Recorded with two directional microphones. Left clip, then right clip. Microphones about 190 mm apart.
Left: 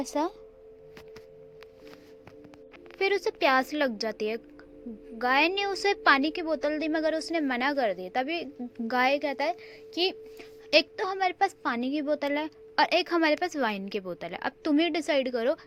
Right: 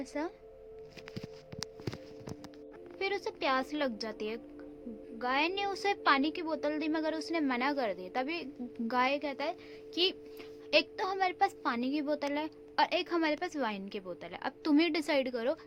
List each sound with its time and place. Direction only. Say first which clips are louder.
0.0 s a woman's voice: left 8 dB; 25° left (ahead or behind)
3.0 s a woman's voice: left 9 dB; 30° left (ahead or behind)
14.6 s a woman's voice: left 3 dB; 15° left (ahead or behind)